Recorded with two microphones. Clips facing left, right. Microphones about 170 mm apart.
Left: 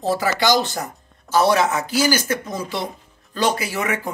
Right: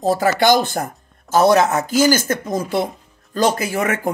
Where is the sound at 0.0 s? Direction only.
50° right (ahead or behind).